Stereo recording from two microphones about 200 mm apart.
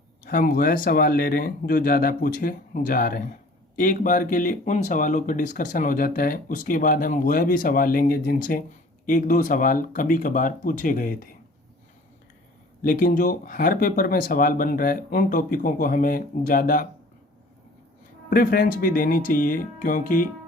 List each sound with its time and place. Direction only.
0.3 s speech: 45° left (ahead or behind)
12.8 s speech: 45° left (ahead or behind)
18.3 s speech: 50° left (ahead or behind)